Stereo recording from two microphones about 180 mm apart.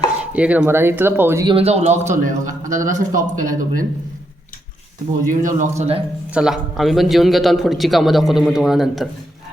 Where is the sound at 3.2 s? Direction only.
20° right (ahead or behind).